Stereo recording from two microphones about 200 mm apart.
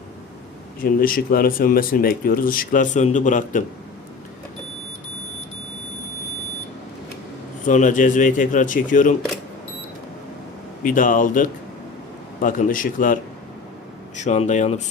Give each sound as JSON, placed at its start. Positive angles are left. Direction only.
{"t": 0.8, "sound": "speech", "side_deg": 45}
{"t": 7.6, "sound": "speech", "side_deg": 40}
{"t": 10.8, "sound": "speech", "side_deg": 40}
{"t": 14.2, "sound": "speech", "side_deg": 35}